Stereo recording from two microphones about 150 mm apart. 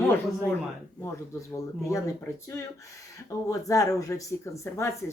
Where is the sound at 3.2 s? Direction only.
20° left (ahead or behind).